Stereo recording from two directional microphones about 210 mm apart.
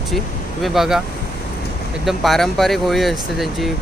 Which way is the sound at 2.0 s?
Centre (ahead or behind).